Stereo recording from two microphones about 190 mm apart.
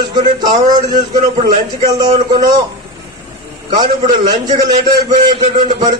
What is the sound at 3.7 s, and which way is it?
A man's voice, 20° right (ahead or behind).